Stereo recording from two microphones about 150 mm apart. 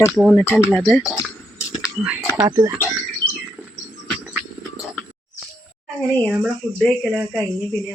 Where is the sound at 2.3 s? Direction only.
20° right (ahead or behind).